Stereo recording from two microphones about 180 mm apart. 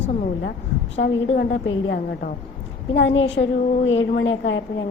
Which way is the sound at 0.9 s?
85° left.